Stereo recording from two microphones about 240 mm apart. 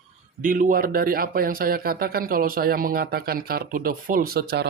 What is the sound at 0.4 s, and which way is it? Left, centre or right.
Speech, right.